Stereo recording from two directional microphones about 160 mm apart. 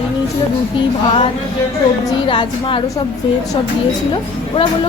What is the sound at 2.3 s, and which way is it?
Speech, 30° left (ahead or behind).